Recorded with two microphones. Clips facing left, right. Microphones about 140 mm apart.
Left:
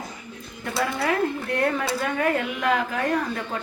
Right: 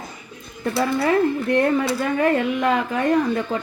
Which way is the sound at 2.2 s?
25° right (ahead or behind).